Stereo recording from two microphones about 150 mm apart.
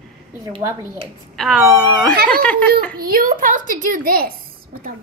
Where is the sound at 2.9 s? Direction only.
75° right (ahead or behind).